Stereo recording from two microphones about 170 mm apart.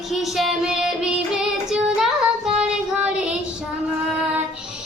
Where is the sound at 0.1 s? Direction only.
Centre (ahead or behind).